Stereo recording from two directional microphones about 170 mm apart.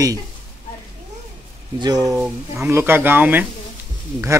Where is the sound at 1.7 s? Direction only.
25° right (ahead or behind).